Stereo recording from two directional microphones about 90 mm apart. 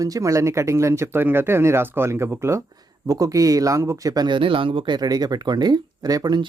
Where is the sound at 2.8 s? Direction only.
40° right (ahead or behind).